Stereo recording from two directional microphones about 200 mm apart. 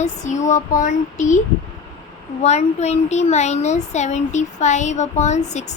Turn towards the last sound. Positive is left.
turn(degrees=35)  # may be behind; listen again after turning